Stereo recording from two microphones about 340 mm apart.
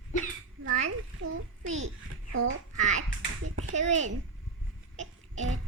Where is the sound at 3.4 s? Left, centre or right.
Right.